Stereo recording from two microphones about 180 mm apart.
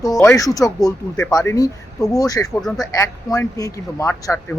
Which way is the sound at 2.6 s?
Centre (ahead or behind).